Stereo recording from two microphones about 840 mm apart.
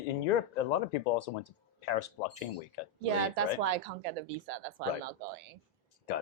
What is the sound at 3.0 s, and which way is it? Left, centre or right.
Speech, right.